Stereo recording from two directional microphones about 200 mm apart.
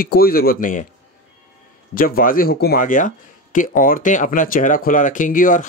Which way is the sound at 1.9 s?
45° left (ahead or behind).